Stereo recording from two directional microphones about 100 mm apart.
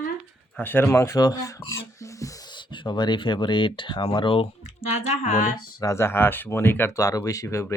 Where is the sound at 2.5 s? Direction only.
50° left (ahead or behind).